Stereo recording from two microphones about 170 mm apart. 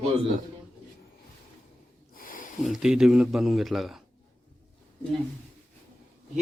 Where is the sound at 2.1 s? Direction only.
55° left (ahead or behind).